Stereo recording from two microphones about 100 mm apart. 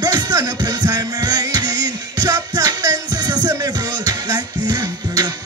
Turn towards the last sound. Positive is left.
turn(degrees=-45)  # may be behind; listen again after turning